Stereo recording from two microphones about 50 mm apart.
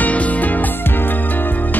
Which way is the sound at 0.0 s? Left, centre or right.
Left.